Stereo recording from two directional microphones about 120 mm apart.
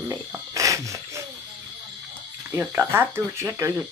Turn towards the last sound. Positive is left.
turn(degrees=-20)  # may be behind; listen again after turning